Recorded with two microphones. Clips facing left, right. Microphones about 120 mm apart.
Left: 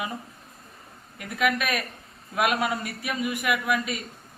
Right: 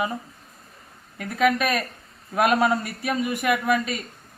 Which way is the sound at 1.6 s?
30° right (ahead or behind).